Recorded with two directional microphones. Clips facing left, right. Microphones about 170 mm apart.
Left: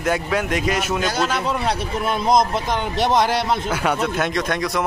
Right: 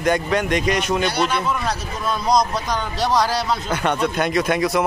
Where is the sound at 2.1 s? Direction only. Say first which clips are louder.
Left 1 dB; 25° left (ahead or behind).